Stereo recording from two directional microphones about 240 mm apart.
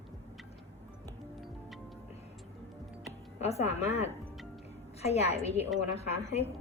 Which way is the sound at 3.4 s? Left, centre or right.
Left.